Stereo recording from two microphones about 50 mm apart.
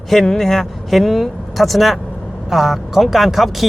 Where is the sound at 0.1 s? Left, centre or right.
Centre.